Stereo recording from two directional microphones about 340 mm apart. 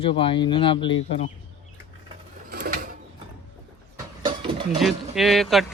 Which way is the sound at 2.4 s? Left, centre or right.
Right.